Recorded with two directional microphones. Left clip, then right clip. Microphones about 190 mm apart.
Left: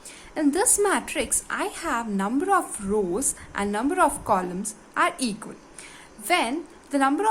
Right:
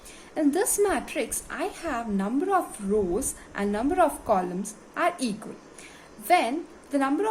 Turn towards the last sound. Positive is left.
turn(degrees=25)  # may be behind; listen again after turning